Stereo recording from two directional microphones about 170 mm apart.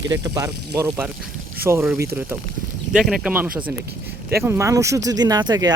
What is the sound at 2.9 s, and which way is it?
Speech, 5° right (ahead or behind).